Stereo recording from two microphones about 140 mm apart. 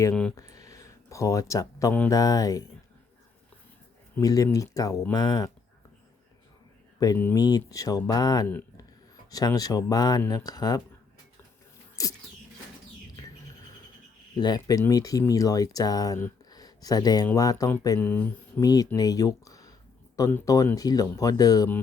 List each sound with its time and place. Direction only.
0.1 s speech: 5° left (ahead or behind)
0.3 s a sound: 25° left (ahead or behind)
2.0 s speech: 25° left (ahead or behind)
4.2 s speech: 25° left (ahead or behind)
7.0 s speech: 25° left (ahead or behind)
12.0 s speech: 25° left (ahead or behind)
14.3 s speech: 30° left (ahead or behind)
16.5 s a sound: 30° left (ahead or behind)
17.3 s speech: 25° left (ahead or behind)
18.0 s speech: 15° left (ahead or behind)
18.6 s speech: 25° left (ahead or behind)